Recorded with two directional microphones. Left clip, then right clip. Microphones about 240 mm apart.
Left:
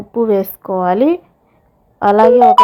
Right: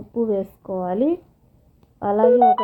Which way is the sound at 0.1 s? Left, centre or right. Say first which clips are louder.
Left 8 dB; left.